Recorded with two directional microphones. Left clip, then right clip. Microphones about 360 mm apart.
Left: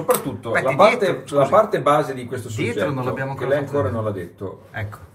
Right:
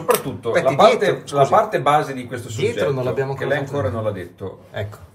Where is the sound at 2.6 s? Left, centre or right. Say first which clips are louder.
Right 3 dB; centre.